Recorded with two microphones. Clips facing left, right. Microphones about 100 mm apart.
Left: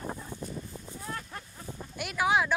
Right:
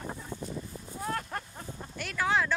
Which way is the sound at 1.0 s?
55° right (ahead or behind).